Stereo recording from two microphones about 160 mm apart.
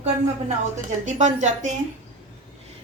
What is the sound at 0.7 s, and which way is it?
Speech, 50° right (ahead or behind).